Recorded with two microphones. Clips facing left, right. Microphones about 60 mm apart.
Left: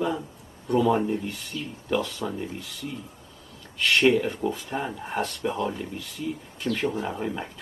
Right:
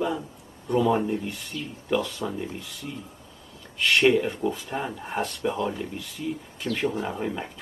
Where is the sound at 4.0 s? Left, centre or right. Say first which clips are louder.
Even; centre.